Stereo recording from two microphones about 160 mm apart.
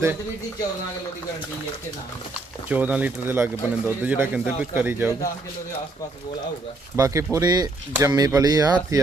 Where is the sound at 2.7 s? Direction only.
10° right (ahead or behind).